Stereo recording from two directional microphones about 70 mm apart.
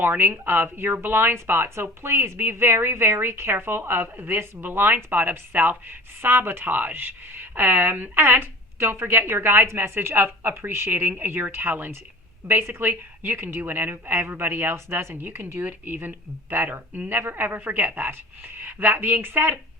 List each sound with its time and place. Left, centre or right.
0.0 s speech: right